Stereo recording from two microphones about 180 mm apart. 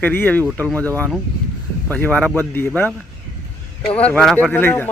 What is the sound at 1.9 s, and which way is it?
Speech, 10° left (ahead or behind).